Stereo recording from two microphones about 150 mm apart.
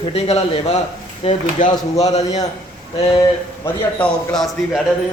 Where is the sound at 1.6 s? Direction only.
60° left (ahead or behind).